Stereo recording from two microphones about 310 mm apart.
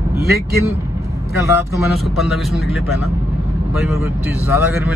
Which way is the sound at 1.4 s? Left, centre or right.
Centre.